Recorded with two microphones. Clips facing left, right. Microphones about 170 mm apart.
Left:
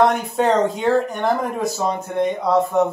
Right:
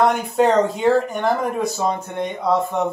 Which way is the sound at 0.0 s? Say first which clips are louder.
Even; centre (ahead or behind).